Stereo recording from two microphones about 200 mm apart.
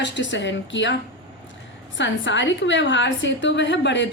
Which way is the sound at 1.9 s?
65° left (ahead or behind).